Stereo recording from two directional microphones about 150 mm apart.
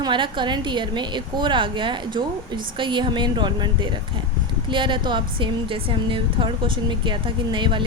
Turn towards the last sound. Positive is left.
turn(degrees=-35)  # may be behind; listen again after turning